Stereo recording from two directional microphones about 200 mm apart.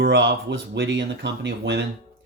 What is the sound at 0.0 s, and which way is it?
Speech, 60° right (ahead or behind).